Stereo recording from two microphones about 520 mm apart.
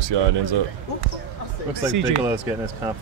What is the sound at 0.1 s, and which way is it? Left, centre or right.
Speech, right.